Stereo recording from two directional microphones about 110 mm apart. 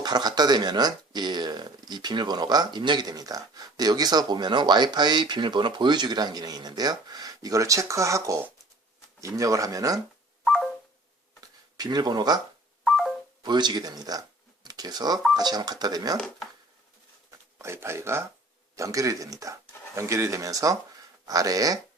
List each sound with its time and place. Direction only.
0.0 s speech: 40° right (ahead or behind)
10.4 s a sound: centre (ahead or behind)
11.3 s a sound: 40° right (ahead or behind)
13.4 s speech: 40° right (ahead or behind)
16.1 s speech: 5° left (ahead or behind)
17.6 s speech: 25° right (ahead or behind)